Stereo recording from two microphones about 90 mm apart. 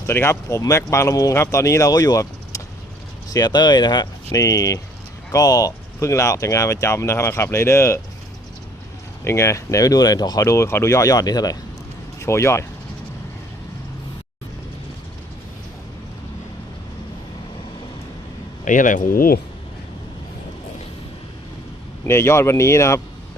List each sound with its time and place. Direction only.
0.1 s speech: 30° left (ahead or behind); by 4.1 s 50° left (ahead or behind)
4.3 s speech: 35° left (ahead or behind)
9.2 s speech: 30° left (ahead or behind); by 10.4 s 45° left (ahead or behind)
10.4 s speech: 30° left (ahead or behind)
12.2 s speech: 30° left (ahead or behind)
22.0 s speech: 30° left (ahead or behind)